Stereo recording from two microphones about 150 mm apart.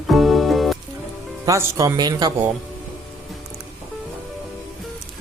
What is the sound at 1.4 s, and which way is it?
Speech, 20° right (ahead or behind).